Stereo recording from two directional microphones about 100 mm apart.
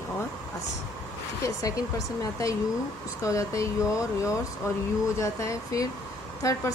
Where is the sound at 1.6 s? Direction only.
35° left (ahead or behind).